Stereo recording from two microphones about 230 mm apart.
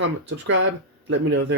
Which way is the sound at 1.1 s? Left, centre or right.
Right.